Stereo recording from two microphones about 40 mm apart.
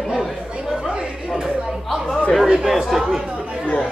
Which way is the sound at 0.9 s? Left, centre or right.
Centre.